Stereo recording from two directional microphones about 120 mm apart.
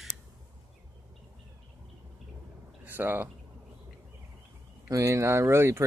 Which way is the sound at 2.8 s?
15° right (ahead or behind).